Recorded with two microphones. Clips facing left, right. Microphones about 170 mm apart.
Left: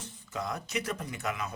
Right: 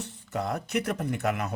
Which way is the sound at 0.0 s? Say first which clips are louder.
Right 5 dB; 60° right (ahead or behind).